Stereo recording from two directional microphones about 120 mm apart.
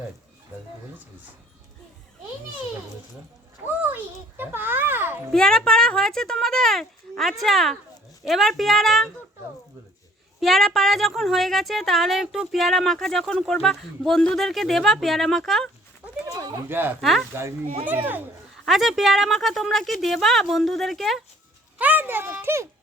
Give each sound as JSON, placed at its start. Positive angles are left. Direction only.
{"t": 3.8, "sound": "a child's voice", "side_deg": -15}
{"t": 5.3, "sound": "a woman's voice", "side_deg": 5}
{"t": 10.4, "sound": "a woman's voice", "side_deg": 0}
{"t": 16.2, "sound": "a sound", "side_deg": -30}
{"t": 16.6, "sound": "a child's voice", "side_deg": -20}
{"t": 17.0, "sound": "a woman's voice", "side_deg": 0}
{"t": 17.8, "sound": "a child's voice", "side_deg": -15}
{"t": 18.6, "sound": "a woman's voice", "side_deg": 0}
{"t": 21.8, "sound": "a child's voice", "side_deg": -15}